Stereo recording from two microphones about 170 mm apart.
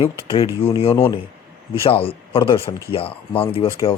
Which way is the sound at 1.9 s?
35° left (ahead or behind).